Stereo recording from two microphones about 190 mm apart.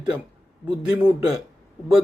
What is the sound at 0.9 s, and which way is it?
Speech, 10° right (ahead or behind).